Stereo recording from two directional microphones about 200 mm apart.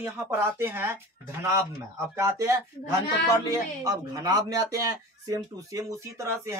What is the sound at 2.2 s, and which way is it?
Speech, 15° right (ahead or behind).